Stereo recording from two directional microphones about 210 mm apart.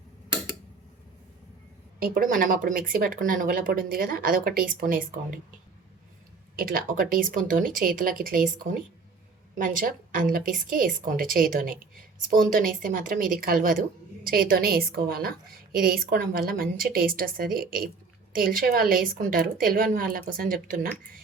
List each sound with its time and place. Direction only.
2.0 s speech: 45° right (ahead or behind)
6.6 s a woman's voice: 45° right (ahead or behind)